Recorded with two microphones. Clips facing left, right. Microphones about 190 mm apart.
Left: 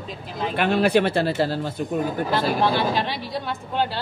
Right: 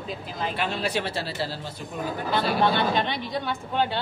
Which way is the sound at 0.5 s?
60° left (ahead or behind).